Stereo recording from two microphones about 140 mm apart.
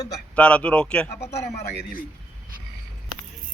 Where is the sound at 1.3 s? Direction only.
50° left (ahead or behind).